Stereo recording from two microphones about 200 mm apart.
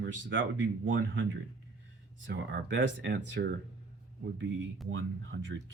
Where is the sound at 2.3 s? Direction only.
60° right (ahead or behind).